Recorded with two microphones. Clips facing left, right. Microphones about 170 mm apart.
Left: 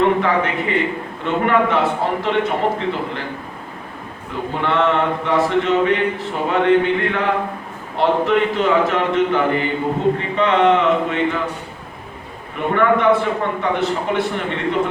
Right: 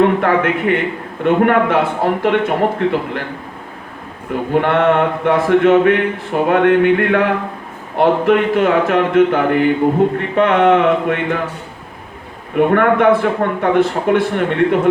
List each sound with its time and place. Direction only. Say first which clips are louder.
0.0 s a man's voice: right 3 dB; 55° right (ahead or behind)
4.3 s speech: right 6 dB; 55° right (ahead or behind)
12.5 s a man's voice: right 5 dB; 55° right (ahead or behind)